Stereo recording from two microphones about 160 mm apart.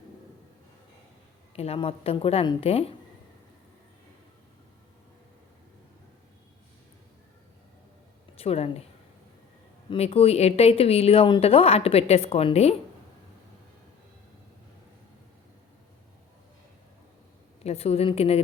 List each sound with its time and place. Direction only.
1.5 s speech: 40° left (ahead or behind)
8.4 s speech: 40° left (ahead or behind)
9.9 s speech: 40° left (ahead or behind)
17.6 s speech: 40° left (ahead or behind)